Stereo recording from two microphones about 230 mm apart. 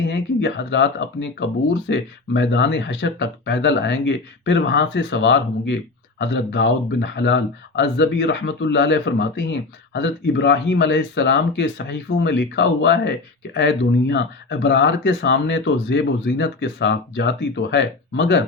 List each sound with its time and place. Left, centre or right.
0.1 s speech: left